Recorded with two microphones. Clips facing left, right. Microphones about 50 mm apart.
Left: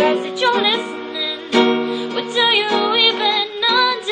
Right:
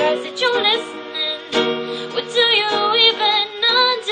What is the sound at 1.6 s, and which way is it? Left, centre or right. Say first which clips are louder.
Music: left 4 dB; centre.